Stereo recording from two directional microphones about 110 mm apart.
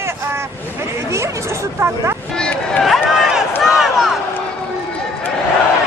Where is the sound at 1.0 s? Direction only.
25° right (ahead or behind).